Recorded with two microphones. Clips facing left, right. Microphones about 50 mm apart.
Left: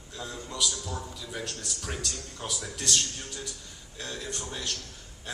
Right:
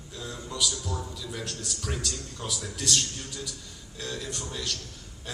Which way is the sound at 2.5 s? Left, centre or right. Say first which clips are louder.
Right 1 dB; left.